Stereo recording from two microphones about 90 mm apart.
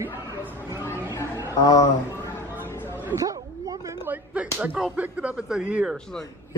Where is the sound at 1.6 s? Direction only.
45° left (ahead or behind).